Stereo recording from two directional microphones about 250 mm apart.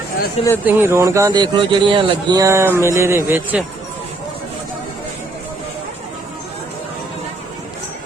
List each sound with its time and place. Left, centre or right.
0.6 s speech: centre